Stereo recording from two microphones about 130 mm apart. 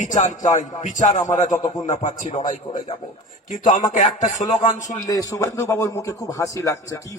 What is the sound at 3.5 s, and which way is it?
A man's voice, 75° left (ahead or behind).